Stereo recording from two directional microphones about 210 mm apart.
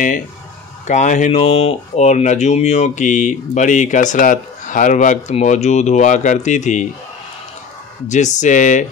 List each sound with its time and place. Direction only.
0.8 s speech: 35° left (ahead or behind)
8.4 s speech: 35° left (ahead or behind)